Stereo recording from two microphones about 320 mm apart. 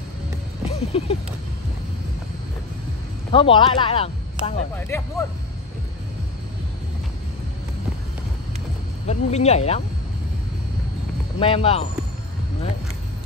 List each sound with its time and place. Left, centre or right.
0.7 s music: centre
3.3 s speech: centre
4.7 s speech: centre
9.0 s speech: centre
11.3 s speech: centre